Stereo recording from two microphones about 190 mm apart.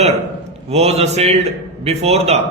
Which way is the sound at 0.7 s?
35° right (ahead or behind).